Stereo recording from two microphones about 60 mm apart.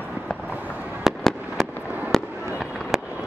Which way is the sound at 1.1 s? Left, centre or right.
Centre.